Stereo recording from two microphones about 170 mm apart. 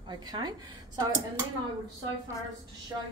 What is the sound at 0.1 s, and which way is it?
Speech, 25° right (ahead or behind).